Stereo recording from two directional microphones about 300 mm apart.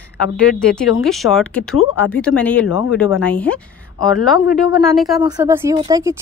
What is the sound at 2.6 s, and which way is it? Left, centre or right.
Speech, left.